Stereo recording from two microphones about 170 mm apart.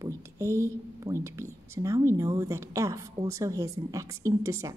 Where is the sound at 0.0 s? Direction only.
15° right (ahead or behind).